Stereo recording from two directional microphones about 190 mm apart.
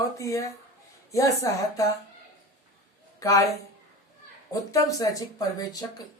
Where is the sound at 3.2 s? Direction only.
15° left (ahead or behind).